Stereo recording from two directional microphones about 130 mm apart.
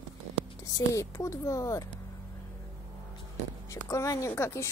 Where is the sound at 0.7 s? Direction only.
25° left (ahead or behind).